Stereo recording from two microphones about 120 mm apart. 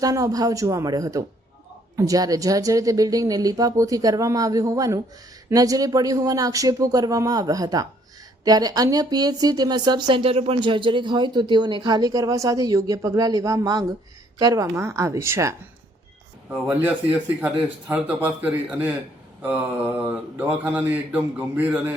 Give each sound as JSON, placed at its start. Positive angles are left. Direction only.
{"t": 0.0, "sound": "a woman's voice", "side_deg": -30}